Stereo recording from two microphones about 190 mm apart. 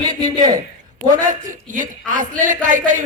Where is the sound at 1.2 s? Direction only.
40° right (ahead or behind).